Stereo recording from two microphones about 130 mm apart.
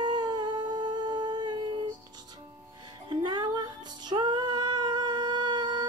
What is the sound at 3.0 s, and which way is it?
Music, 35° right (ahead or behind).